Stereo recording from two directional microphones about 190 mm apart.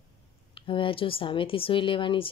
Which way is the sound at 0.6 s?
25° left (ahead or behind).